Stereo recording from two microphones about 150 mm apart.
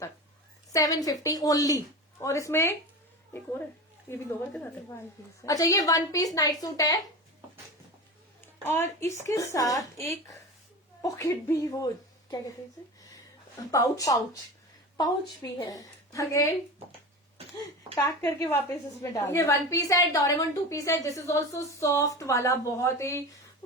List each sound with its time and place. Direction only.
0.7 s a woman's voice: 25° left (ahead or behind)
4.1 s a woman's voice: 15° left (ahead or behind)
8.6 s a woman's voice: 15° left (ahead or behind)
13.7 s a woman's voice: 20° left (ahead or behind)
15.4 s a woman's voice: 20° left (ahead or behind)
18.0 s a woman's voice: 20° left (ahead or behind)